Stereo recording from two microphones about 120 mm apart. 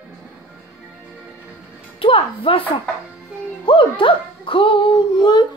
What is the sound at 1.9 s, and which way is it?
Music, 50° left (ahead or behind).